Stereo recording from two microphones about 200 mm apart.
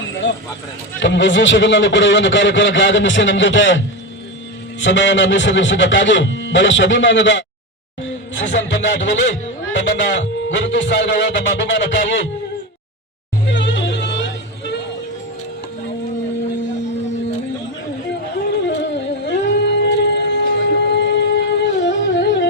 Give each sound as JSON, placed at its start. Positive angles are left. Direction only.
{"t": 0.2, "sound": "a man's voice", "side_deg": 65}
{"t": 8.5, "sound": "a man's voice", "side_deg": 60}
{"t": 13.5, "sound": "music", "side_deg": 65}
{"t": 18.9, "sound": "music", "side_deg": 60}